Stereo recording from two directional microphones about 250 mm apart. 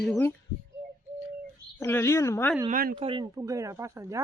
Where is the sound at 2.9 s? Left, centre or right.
Right.